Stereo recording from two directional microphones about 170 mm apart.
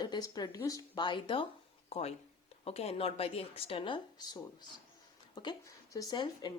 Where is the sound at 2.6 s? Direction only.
35° left (ahead or behind).